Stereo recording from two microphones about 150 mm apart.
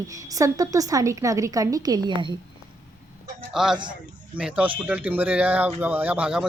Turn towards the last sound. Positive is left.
turn(degrees=-5)  # may be behind; listen again after turning